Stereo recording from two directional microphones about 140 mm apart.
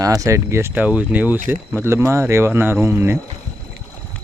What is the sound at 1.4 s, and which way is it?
Speech, 70° right (ahead or behind).